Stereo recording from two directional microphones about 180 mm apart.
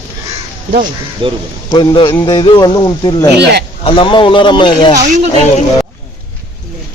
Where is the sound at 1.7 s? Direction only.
25° left (ahead or behind).